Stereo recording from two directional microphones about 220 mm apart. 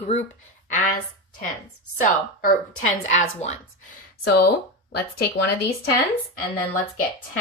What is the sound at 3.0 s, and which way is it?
Speech, 30° left (ahead or behind).